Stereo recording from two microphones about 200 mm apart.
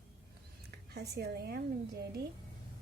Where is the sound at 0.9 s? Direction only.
50° right (ahead or behind).